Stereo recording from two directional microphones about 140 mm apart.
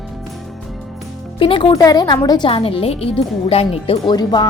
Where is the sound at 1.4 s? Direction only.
40° left (ahead or behind).